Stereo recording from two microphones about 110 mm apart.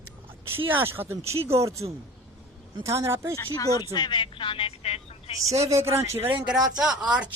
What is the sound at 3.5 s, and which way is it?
Speech, 35° left (ahead or behind).